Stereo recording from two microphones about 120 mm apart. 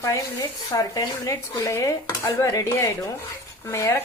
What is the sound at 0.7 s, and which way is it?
Speech, 30° left (ahead or behind).